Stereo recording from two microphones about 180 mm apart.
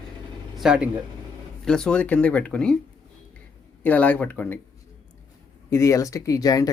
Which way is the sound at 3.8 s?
10° left (ahead or behind).